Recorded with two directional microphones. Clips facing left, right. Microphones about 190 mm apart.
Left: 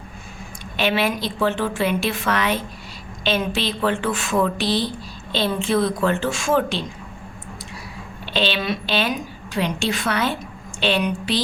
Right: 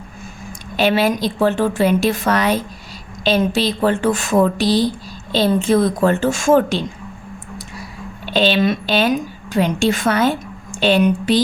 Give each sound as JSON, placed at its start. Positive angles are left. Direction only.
{"t": 0.8, "sound": "a woman's voice", "side_deg": -40}
{"t": 8.3, "sound": "a woman's voice", "side_deg": -45}